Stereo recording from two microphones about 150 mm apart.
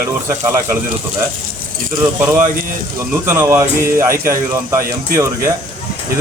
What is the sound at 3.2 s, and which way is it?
Speech, 15° right (ahead or behind).